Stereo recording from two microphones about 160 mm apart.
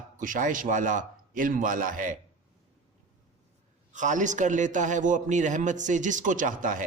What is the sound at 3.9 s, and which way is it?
A man's voice, 50° right (ahead or behind).